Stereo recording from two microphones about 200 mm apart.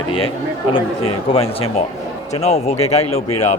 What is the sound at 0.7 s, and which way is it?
A man's voice, 30° left (ahead or behind).